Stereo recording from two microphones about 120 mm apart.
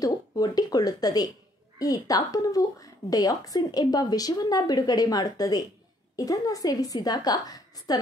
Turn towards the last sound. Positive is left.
turn(degrees=35)  # may be behind; listen again after turning